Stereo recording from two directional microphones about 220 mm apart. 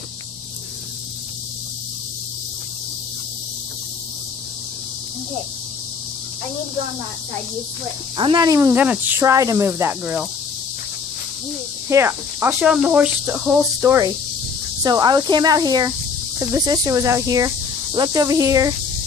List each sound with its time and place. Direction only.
8.2 s speech: 20° right (ahead or behind)
11.9 s speech: 10° right (ahead or behind)